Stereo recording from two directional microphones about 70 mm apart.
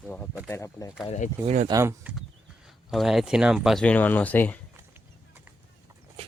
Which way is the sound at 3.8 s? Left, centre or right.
Left.